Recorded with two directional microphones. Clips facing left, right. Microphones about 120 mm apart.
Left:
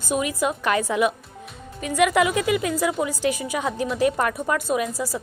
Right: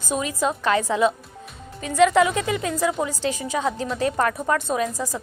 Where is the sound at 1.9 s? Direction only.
15° left (ahead or behind).